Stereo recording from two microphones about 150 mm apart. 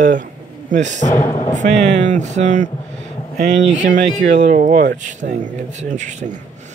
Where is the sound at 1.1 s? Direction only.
15° left (ahead or behind).